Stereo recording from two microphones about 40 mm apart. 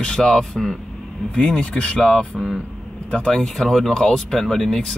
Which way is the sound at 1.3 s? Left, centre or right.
Left.